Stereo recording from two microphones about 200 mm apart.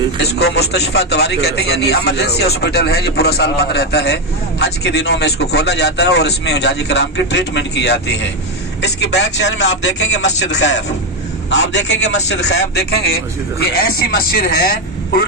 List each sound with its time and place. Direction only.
0.2 s a man's voice: 55° left (ahead or behind)